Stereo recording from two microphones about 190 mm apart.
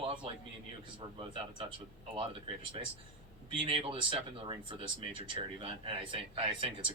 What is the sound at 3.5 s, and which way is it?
Speech, 25° right (ahead or behind).